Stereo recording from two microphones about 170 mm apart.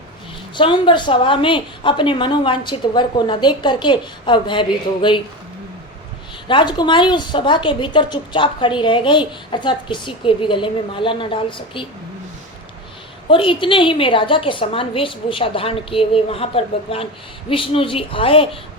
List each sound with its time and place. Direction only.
0.5 s a woman's voice: 30° left (ahead or behind)
6.5 s a woman's voice: 25° left (ahead or behind)
13.3 s a woman's voice: 30° left (ahead or behind)